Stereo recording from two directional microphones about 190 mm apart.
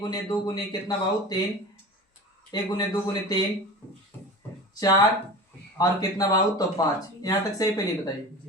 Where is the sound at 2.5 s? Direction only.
25° left (ahead or behind).